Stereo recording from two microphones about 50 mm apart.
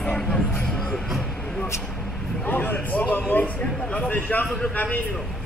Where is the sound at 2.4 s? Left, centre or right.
Left.